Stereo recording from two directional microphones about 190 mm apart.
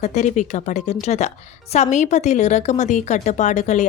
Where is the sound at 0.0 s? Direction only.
35° left (ahead or behind).